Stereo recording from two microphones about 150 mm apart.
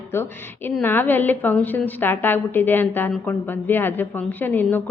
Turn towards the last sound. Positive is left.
turn(degrees=10)  # may be behind; listen again after turning